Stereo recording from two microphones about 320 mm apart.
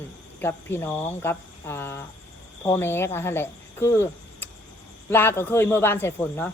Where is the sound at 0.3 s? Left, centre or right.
Centre.